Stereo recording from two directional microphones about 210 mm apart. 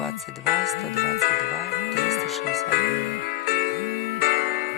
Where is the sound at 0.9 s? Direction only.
45° left (ahead or behind).